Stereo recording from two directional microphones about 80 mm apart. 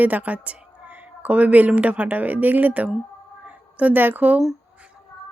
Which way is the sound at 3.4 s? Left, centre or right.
Centre.